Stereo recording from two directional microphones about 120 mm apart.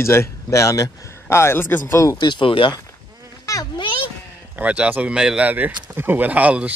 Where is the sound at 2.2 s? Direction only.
40° left (ahead or behind).